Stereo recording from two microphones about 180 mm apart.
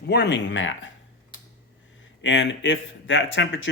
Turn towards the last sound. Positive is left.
turn(degrees=90)